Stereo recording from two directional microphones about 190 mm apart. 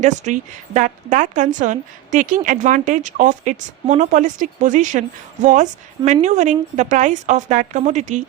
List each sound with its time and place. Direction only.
0.0 s speech: 40° right (ahead or behind)